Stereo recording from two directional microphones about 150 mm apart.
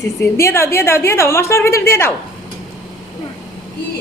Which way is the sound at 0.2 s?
20° left (ahead or behind).